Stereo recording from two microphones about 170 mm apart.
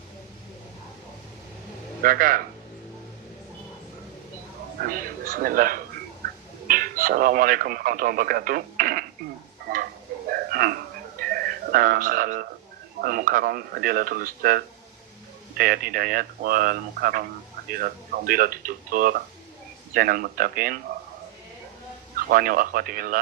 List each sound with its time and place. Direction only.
2.0 s speech: 55° right (ahead or behind)
4.9 s speech: 55° right (ahead or behind)
10.2 s a sound: 60° right (ahead or behind)
11.2 s music: 60° right (ahead or behind)
13.0 s speech: 55° right (ahead or behind)
22.3 s speech: 60° right (ahead or behind)